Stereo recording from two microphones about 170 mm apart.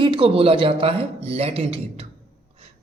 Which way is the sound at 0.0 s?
30° right (ahead or behind).